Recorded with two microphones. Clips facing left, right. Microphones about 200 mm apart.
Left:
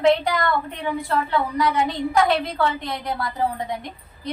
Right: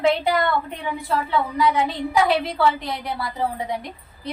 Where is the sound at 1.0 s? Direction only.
Centre (ahead or behind).